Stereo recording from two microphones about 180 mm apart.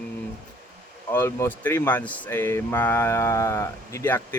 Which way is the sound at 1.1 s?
10° left (ahead or behind).